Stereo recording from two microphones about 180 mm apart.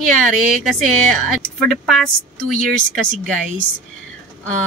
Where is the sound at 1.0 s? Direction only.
5° left (ahead or behind).